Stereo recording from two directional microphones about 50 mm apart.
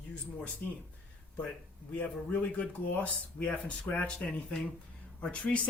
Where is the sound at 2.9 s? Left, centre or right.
Left.